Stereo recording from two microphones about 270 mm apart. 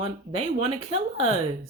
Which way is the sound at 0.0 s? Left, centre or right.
Right.